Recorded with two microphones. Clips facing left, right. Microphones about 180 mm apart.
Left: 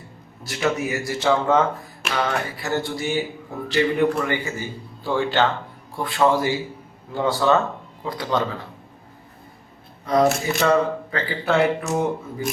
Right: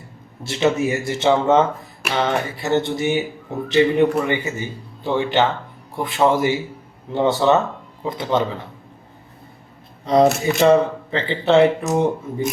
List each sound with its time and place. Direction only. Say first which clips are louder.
0.4 s speech: right 5 dB; 25° right (ahead or behind)
10.1 s speech: right 4 dB; 20° right (ahead or behind)